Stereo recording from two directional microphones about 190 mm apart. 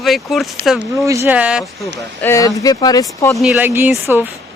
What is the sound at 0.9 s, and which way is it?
Speech, 15° right (ahead or behind).